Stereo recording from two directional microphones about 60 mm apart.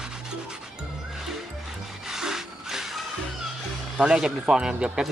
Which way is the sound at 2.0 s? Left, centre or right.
Centre.